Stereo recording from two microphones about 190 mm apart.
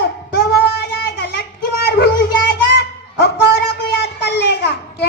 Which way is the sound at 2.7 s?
60° left (ahead or behind).